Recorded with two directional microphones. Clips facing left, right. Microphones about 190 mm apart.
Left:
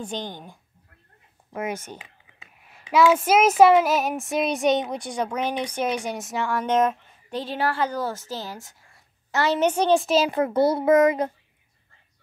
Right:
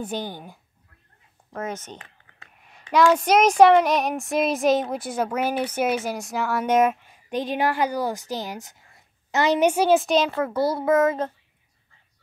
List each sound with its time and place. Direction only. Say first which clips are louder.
0.0 s speech: right 2 dB; 5° right (ahead or behind)
1.5 s speech: left 1 dB; 10° left (ahead or behind)
10.3 s a child's voice: left 3 dB; 20° left (ahead or behind)